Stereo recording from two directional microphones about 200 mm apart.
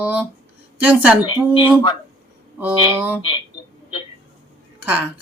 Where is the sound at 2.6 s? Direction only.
10° right (ahead or behind).